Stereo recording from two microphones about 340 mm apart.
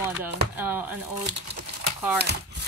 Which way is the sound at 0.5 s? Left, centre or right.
Centre.